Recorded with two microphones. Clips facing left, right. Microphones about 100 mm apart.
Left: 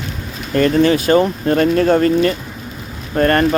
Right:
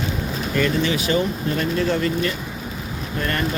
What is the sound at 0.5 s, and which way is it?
Speech, 50° left (ahead or behind).